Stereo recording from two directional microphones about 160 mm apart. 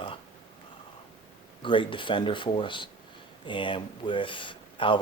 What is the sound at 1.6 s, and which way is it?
Speech, 30° left (ahead or behind).